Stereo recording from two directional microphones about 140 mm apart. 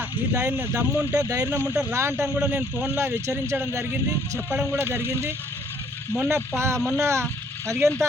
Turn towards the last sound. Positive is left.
turn(degrees=-20)  # may be behind; listen again after turning